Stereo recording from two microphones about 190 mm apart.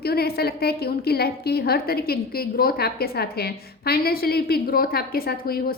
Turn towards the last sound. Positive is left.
turn(degrees=55)  # may be behind; listen again after turning